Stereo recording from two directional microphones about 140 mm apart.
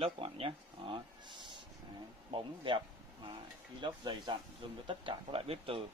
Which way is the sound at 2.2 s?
35° right (ahead or behind).